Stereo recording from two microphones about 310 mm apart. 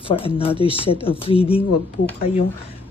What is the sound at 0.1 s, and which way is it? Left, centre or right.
A woman's voice, centre.